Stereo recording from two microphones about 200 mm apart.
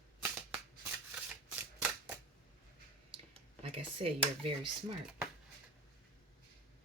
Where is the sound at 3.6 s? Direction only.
25° right (ahead or behind).